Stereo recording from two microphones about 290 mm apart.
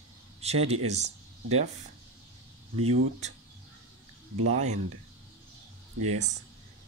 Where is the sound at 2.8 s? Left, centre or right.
Right.